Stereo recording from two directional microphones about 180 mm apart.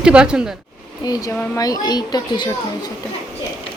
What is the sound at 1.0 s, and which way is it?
A woman's voice, 20° left (ahead or behind).